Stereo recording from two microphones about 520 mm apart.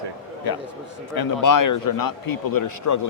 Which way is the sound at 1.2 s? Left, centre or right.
Left.